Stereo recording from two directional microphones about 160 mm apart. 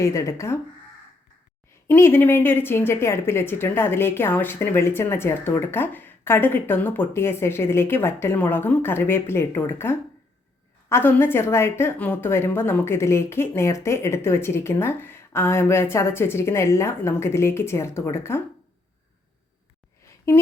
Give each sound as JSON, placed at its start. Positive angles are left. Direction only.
{"t": 0.1, "sound": "speech", "side_deg": 20}
{"t": 1.9, "sound": "a woman's voice", "side_deg": 15}
{"t": 20.3, "sound": "a woman's voice", "side_deg": 15}